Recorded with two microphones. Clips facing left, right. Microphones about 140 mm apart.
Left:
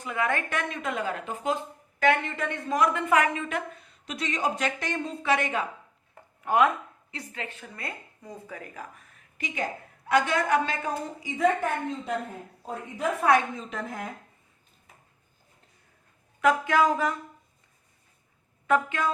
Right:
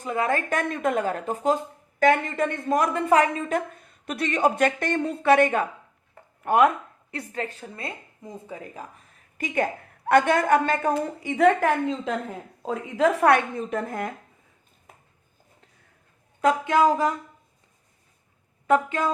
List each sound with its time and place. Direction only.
0.0 s a woman's voice: 35° right (ahead or behind); by 7.4 s 55° right (ahead or behind)
7.4 s speech: 35° right (ahead or behind)
10.1 s a woman's voice: 55° right (ahead or behind)
10.9 s a woman's voice: 65° right (ahead or behind)
16.4 s a woman's voice: 25° right (ahead or behind)
18.7 s a woman's voice: 35° right (ahead or behind)